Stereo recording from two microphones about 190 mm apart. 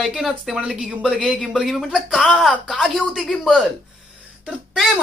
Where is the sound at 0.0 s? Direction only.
Centre (ahead or behind).